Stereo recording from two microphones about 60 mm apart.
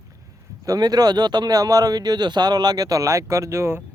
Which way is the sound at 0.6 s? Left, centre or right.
Right.